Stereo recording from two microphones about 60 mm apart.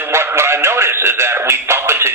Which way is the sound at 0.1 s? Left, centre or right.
Right.